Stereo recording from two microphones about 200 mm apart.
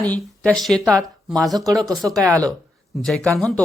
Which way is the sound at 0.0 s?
5° left (ahead or behind).